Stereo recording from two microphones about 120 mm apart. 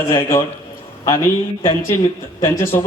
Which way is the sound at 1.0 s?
25° left (ahead or behind).